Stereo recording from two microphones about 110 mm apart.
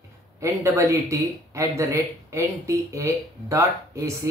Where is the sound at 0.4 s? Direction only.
25° right (ahead or behind).